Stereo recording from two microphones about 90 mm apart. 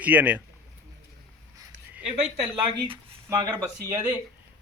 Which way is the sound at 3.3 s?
50° right (ahead or behind).